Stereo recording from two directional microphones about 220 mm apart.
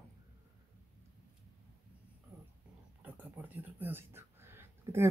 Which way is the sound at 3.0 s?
10° right (ahead or behind).